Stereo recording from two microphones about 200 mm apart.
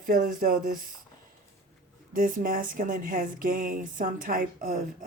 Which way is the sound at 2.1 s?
45° right (ahead or behind).